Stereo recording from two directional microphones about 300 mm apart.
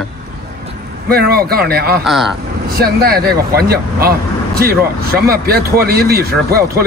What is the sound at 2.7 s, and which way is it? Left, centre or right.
Speech, right.